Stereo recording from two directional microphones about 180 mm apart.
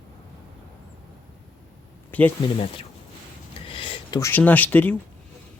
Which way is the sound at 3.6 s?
30° left (ahead or behind).